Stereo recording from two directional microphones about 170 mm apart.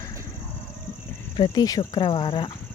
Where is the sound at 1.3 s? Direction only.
25° left (ahead or behind).